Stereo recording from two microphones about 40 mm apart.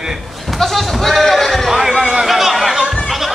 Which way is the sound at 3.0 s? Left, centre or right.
Centre.